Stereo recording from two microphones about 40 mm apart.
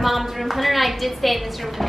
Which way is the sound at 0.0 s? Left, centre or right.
Centre.